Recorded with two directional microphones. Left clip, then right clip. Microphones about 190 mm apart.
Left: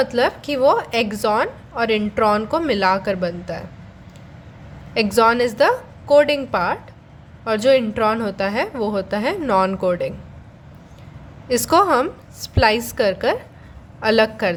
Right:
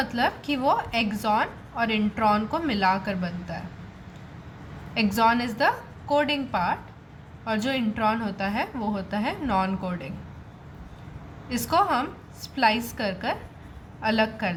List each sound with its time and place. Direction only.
0.0 s a woman's voice: 45° left (ahead or behind)
4.9 s a woman's voice: 45° left (ahead or behind)
11.4 s a woman's voice: 50° left (ahead or behind)